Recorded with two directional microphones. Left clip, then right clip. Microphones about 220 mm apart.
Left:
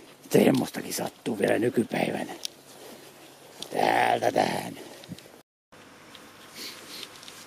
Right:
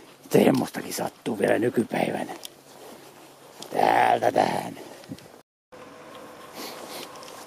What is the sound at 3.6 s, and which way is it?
Dog, centre (ahead or behind).